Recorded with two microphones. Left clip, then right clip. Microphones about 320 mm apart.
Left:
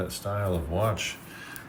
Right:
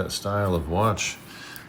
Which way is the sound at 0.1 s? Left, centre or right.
Centre.